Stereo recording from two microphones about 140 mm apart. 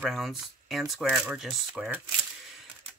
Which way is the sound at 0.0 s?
Centre (ahead or behind).